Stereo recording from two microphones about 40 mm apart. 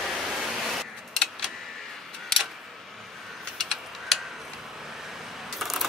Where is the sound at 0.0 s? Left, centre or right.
Centre.